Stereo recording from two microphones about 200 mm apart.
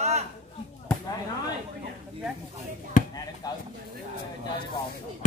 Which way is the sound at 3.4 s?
20° left (ahead or behind).